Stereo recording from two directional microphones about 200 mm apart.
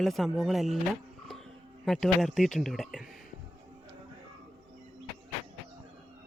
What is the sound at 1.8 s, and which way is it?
Speech, centre (ahead or behind).